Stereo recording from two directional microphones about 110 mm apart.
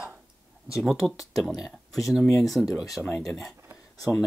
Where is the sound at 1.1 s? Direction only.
30° left (ahead or behind).